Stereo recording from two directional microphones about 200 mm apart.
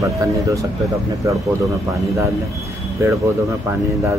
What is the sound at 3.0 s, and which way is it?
Speech, 15° right (ahead or behind).